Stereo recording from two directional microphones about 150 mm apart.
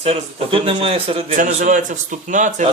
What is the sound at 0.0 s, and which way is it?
A man's voice, 40° right (ahead or behind).